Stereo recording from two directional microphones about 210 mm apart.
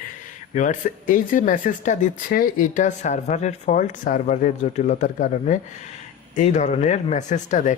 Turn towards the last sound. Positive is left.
turn(degrees=35)  # may be behind; listen again after turning